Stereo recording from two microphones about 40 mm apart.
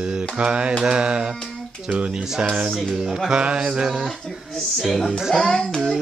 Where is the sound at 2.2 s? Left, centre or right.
Centre.